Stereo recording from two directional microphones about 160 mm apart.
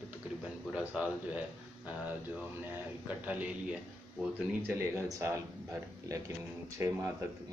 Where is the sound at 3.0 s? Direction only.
10° right (ahead or behind).